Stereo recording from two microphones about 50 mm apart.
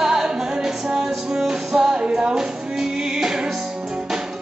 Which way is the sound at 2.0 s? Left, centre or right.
Centre.